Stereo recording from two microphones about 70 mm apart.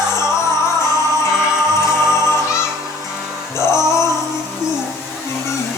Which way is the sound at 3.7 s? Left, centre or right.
Left.